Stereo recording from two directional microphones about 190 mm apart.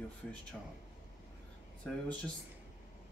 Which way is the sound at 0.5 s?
Centre (ahead or behind).